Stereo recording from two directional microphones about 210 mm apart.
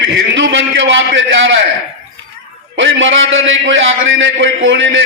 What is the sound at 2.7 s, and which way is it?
A man's voice, 65° right (ahead or behind).